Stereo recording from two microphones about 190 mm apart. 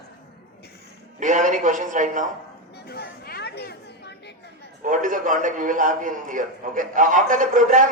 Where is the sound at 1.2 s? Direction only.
40° right (ahead or behind).